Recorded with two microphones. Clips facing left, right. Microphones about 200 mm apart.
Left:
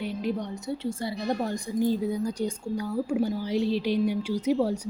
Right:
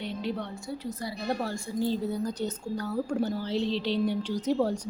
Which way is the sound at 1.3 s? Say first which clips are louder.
Left 2 dB; 15° left (ahead or behind).